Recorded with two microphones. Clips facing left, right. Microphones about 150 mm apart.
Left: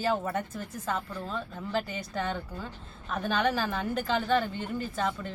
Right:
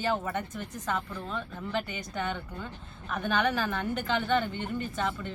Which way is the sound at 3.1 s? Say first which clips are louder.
Even; 30° left (ahead or behind).